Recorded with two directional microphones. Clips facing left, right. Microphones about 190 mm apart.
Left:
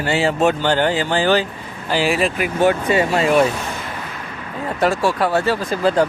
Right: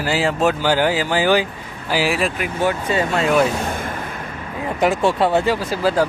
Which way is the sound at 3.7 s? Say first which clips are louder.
Right 3 dB; 50° right (ahead or behind).